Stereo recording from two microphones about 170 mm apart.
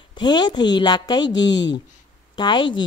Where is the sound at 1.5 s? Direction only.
90° left.